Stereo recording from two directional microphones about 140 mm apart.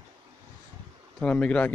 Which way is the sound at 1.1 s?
10° left (ahead or behind).